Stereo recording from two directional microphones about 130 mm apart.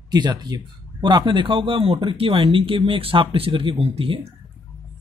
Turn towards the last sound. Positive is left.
turn(degrees=-45)  # may be behind; listen again after turning